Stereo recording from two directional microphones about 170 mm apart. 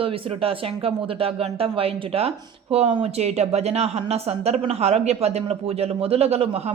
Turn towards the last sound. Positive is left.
turn(degrees=-40)  # may be behind; listen again after turning